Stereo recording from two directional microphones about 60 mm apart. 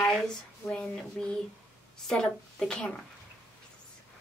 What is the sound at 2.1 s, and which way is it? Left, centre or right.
Speech, centre.